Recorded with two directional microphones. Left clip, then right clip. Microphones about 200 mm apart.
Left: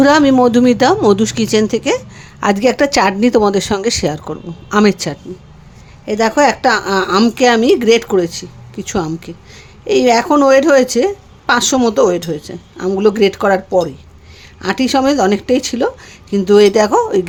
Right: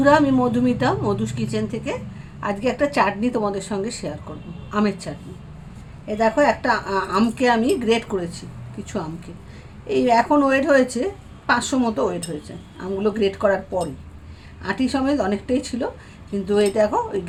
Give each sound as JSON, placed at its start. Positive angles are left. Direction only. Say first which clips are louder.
{"t": 0.0, "sound": "a woman's voice", "louder": "left 7 dB", "side_deg": 50}